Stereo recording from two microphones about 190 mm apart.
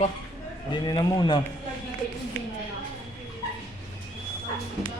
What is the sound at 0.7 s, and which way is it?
Speech, 20° left (ahead or behind).